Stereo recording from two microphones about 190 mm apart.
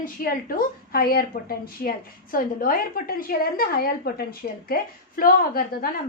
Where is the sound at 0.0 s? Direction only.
50° left (ahead or behind).